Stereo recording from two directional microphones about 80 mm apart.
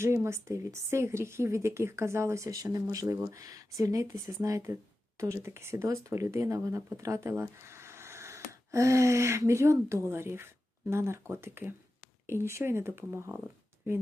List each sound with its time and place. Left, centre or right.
0.0 s speech: right
2.6 s speech: right